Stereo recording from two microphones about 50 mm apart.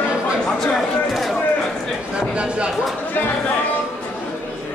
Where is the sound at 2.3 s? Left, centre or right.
Right.